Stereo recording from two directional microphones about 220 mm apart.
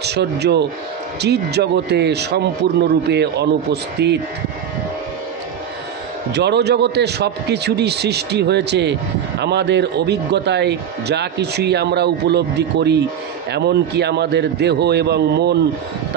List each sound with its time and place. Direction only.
0.0 s a man's voice: 50° right (ahead or behind)
6.3 s a man's voice: 50° right (ahead or behind)